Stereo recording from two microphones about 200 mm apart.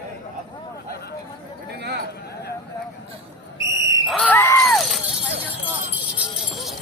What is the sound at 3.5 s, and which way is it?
Whistle, 15° right (ahead or behind).